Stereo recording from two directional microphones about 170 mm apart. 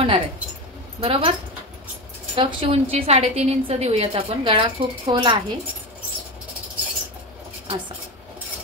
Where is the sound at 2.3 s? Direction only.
35° right (ahead or behind).